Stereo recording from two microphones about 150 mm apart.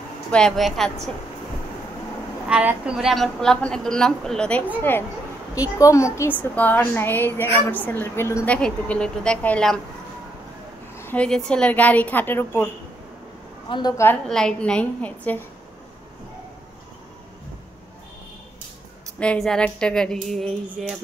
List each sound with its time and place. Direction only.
0.3 s a woman's voice: 5° left (ahead or behind)
2.5 s a woman's voice: 10° right (ahead or behind); by 4.6 s 5° left (ahead or behind)
5.5 s a woman's voice: 20° left (ahead or behind)
8.5 s a woman's voice: 5° left (ahead or behind)
11.0 s a sound: 15° left (ahead or behind)
11.2 s a woman's voice: 5° left (ahead or behind)
13.7 s a woman's voice: 30° left (ahead or behind)
14.3 s a woman's voice: 5° left (ahead or behind)
19.1 s a woman's voice: 5° left (ahead or behind)